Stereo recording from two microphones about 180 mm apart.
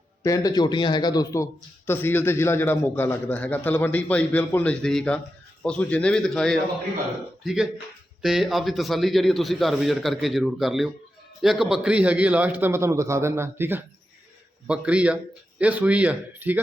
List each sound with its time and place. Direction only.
0.2 s a man's voice: 20° left (ahead or behind); by 16.6 s 10° right (ahead or behind)